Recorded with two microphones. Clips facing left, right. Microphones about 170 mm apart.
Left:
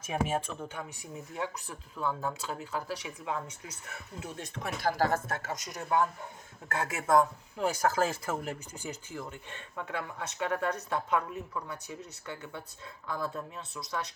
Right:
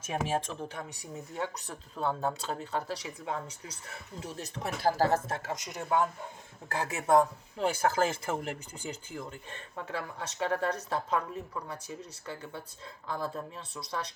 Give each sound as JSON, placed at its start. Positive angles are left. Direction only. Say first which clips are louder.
{"t": 0.3, "sound": "speech", "louder": "right 1 dB", "side_deg": -35}